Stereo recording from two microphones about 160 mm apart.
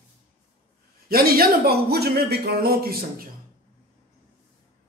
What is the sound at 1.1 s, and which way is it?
Speech, 70° right (ahead or behind).